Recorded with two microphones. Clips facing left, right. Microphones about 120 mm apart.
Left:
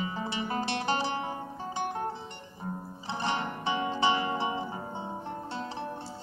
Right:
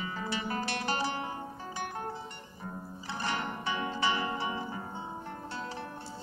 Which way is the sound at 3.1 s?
20° left (ahead or behind).